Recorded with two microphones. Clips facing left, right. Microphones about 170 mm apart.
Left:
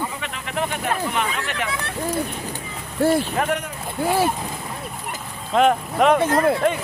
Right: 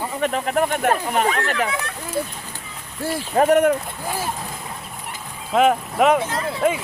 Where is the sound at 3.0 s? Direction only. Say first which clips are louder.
Left 8 dB; 65° left (ahead or behind).